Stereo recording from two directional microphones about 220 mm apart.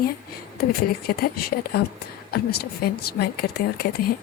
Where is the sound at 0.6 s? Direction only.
45° left (ahead or behind).